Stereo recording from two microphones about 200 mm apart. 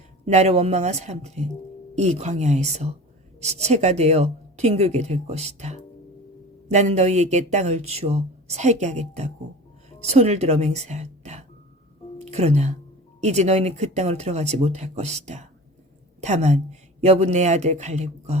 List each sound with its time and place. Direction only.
0.3 s a woman's voice: 35° right (ahead or behind)